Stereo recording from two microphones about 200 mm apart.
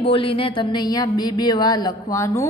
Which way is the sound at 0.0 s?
25° left (ahead or behind).